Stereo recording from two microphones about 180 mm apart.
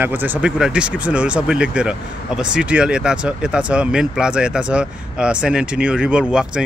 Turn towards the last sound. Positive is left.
turn(degrees=-5)  # may be behind; listen again after turning